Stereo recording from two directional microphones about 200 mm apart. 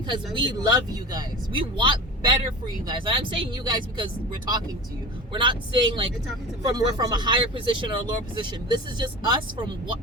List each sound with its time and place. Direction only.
0.3 s speech: 25° right (ahead or behind)